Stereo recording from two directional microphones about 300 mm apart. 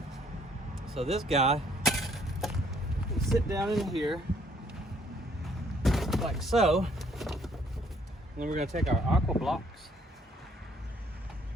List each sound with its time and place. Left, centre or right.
0.9 s speech: centre
1.8 s a sound: centre
3.3 s speech: centre
5.8 s a sound: centre
8.4 s speech: right
8.8 s speech: centre